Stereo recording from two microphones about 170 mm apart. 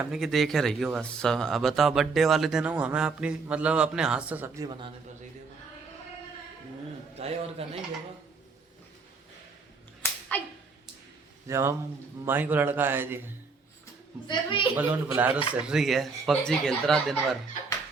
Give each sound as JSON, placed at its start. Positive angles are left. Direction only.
{"t": 0.0, "sound": "speech", "side_deg": 0}
{"t": 7.2, "sound": "a man's voice", "side_deg": -35}
{"t": 10.0, "sound": "a sound", "side_deg": 10}
{"t": 11.4, "sound": "a man's voice", "side_deg": -15}
{"t": 14.3, "sound": "a woman's voice", "side_deg": 30}
{"t": 14.8, "sound": "a man's voice", "side_deg": -10}